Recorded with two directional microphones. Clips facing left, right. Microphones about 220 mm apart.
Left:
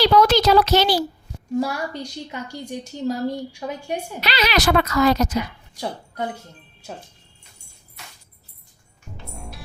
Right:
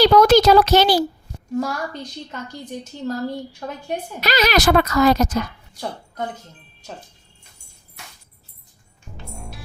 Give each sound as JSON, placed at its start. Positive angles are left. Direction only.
{"t": 0.0, "sound": "speech", "side_deg": -45}
{"t": 1.5, "sound": "a woman's voice", "side_deg": 10}
{"t": 4.2, "sound": "speech", "side_deg": -45}
{"t": 9.3, "sound": "music", "side_deg": 0}